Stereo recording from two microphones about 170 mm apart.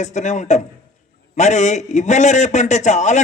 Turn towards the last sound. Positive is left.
turn(degrees=45)  # may be behind; listen again after turning